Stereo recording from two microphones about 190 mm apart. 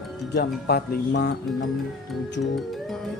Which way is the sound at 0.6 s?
60° left (ahead or behind).